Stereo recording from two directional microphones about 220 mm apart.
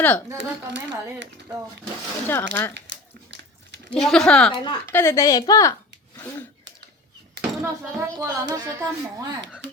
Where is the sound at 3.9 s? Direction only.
Centre (ahead or behind).